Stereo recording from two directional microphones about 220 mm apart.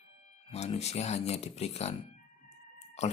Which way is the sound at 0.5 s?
30° left (ahead or behind).